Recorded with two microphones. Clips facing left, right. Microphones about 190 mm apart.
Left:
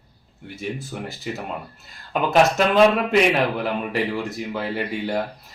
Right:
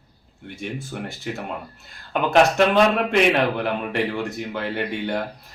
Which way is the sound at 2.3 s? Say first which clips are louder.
Right 1 dB; centre (ahead or behind).